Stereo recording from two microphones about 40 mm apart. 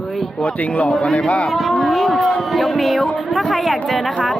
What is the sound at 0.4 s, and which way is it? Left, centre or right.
Speech, left.